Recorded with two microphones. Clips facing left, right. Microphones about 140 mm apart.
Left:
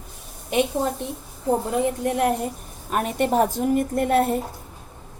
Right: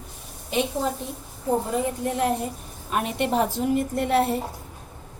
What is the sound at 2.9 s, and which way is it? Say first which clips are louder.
A woman's voice: left 2 dB; 45° left (ahead or behind).